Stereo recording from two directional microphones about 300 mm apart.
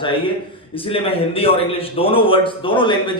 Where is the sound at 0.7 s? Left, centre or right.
Centre.